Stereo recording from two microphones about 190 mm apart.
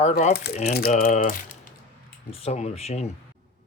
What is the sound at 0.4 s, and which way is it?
Speech, 60° left (ahead or behind).